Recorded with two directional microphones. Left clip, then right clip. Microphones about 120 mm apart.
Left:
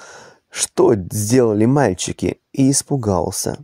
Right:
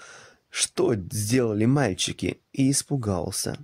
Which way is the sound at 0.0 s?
45° left (ahead or behind).